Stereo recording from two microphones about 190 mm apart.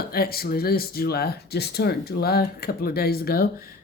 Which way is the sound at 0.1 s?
50° left (ahead or behind).